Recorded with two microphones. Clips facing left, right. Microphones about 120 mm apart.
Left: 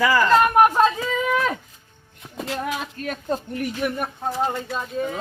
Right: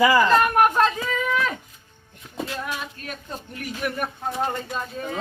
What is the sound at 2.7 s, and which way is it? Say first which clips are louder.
Speech: left 5 dB; 45° left (ahead or behind).